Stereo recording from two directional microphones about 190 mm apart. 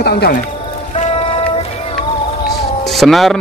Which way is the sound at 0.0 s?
55° left (ahead or behind).